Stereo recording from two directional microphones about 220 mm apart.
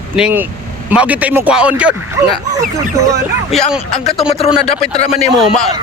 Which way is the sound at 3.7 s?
Centre (ahead or behind).